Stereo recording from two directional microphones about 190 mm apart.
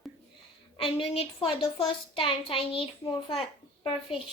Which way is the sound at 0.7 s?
30° left (ahead or behind).